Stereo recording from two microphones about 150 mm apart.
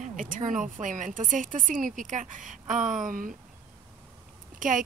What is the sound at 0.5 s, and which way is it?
Speech, 55° right (ahead or behind).